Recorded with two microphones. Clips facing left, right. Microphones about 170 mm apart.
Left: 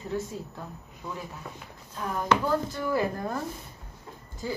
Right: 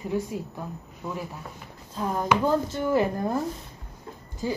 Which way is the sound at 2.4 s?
20° right (ahead or behind).